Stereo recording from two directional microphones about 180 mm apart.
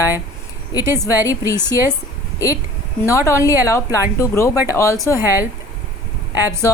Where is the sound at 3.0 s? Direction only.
15° left (ahead or behind).